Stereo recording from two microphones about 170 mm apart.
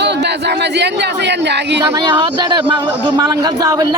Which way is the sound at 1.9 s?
25° right (ahead or behind).